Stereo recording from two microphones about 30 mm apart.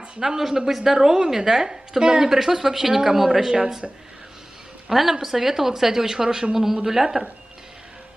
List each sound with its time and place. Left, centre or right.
0.5 s a woman's voice: centre
4.8 s a woman's voice: centre